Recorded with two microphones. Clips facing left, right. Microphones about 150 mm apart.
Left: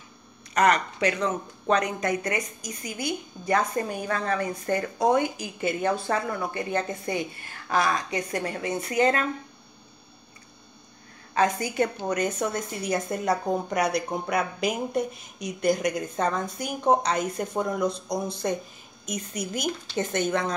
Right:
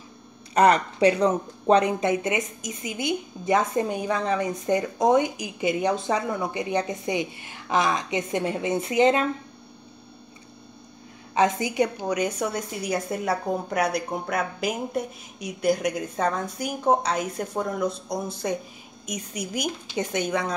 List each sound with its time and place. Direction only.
0.6 s speech: 30° right (ahead or behind)
11.3 s a woman's voice: 20° right (ahead or behind)